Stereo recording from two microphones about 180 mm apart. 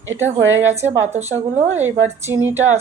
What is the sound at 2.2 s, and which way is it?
Speech, 15° right (ahead or behind).